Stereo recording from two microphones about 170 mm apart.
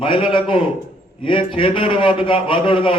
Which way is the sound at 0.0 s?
30° left (ahead or behind).